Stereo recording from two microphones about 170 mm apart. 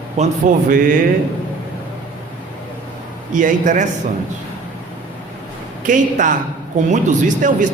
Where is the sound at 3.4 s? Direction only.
50° right (ahead or behind).